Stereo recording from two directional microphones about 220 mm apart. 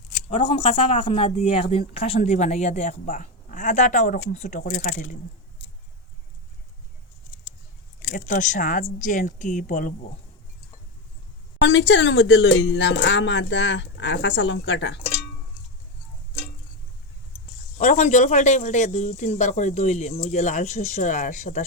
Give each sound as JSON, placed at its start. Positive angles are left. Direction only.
{"t": 0.3, "sound": "speech", "side_deg": 25}
{"t": 8.1, "sound": "speech", "side_deg": 40}
{"t": 11.6, "sound": "speech", "side_deg": 55}
{"t": 17.7, "sound": "speech", "side_deg": 35}